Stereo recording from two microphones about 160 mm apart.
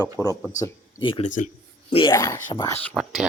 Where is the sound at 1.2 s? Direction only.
50° left (ahead or behind).